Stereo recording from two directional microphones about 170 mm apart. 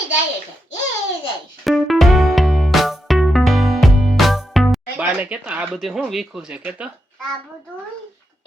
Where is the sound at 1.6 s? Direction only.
Centre (ahead or behind).